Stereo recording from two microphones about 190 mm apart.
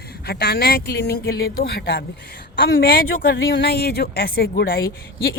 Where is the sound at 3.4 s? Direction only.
80° left; by 5.3 s 50° left (ahead or behind).